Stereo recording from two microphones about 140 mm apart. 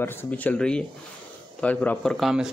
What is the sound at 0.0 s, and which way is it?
Speech, 15° left (ahead or behind).